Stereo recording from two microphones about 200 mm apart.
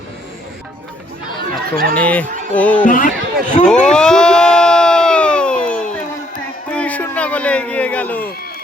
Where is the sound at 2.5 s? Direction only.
5° left (ahead or behind).